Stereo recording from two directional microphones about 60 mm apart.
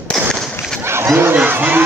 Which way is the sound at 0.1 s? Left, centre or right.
Centre.